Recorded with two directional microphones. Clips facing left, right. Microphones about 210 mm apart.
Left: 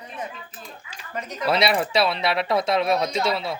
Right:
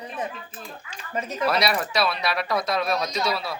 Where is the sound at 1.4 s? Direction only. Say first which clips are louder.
Left 3 dB; 25° left (ahead or behind).